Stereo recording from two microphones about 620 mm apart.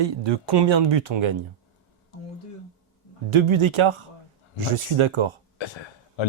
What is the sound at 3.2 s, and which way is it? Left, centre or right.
Speech, right.